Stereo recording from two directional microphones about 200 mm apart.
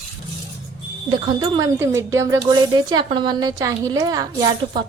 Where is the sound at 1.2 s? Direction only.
20° right (ahead or behind).